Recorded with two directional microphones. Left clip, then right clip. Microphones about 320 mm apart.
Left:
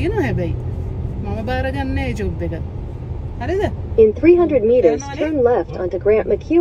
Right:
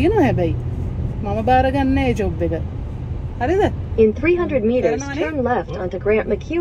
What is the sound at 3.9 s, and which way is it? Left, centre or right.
Speech, left.